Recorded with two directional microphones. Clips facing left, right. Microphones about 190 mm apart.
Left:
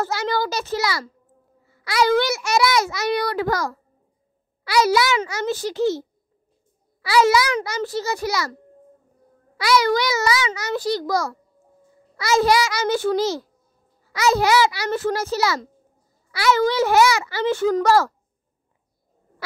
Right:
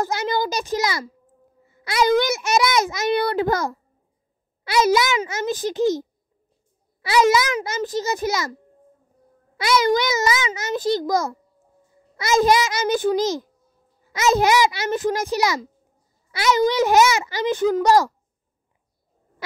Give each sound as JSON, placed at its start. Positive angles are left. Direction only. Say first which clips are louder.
{"t": 0.0, "sound": "a child's voice", "louder": "even", "side_deg": -20}
{"t": 9.6, "sound": "a child's voice", "louder": "even", "side_deg": -20}